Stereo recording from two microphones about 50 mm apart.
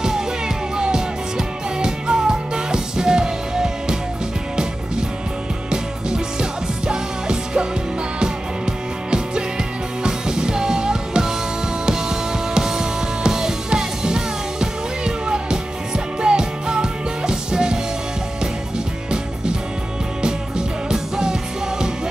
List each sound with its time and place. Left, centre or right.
0.7 s music: centre
5.7 s music: centre
20.2 s music: centre